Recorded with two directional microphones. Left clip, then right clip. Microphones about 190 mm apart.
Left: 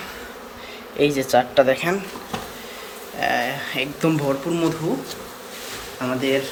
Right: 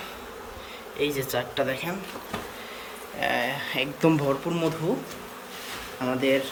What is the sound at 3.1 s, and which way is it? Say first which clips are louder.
Speech: left 4 dB; 5° right (ahead or behind).